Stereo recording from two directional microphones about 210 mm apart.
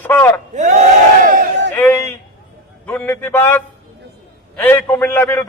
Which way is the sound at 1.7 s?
10° left (ahead or behind).